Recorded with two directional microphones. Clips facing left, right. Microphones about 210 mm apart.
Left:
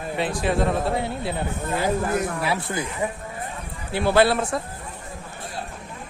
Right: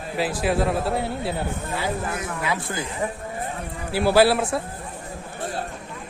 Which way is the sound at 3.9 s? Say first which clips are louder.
Right 1 dB; 5° right (ahead or behind).